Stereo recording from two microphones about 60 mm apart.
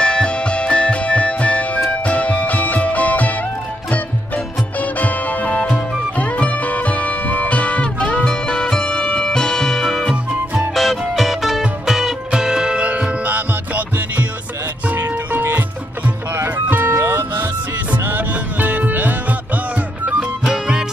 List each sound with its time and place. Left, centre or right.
0.0 s music: centre
4.7 s music: left; by 14.2 s right
15.3 s music: right
17.9 s music: right
20.1 s music: centre